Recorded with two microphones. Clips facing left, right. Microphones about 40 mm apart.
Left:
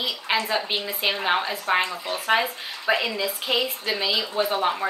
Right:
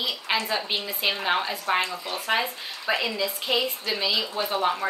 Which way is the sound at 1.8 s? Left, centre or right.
Left.